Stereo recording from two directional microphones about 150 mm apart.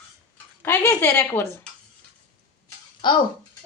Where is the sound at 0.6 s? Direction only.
15° left (ahead or behind).